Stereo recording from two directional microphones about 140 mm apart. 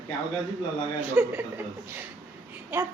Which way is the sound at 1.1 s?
15° right (ahead or behind).